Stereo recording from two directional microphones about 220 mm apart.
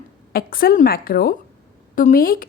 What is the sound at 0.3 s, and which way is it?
A woman's voice, 40° left (ahead or behind).